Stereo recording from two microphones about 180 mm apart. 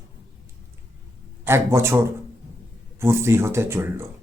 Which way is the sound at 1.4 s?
15° right (ahead or behind).